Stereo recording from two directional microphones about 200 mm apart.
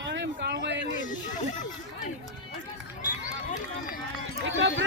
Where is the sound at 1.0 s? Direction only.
40° left (ahead or behind).